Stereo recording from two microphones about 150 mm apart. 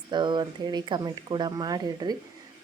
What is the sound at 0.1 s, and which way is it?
A woman's voice, 30° right (ahead or behind).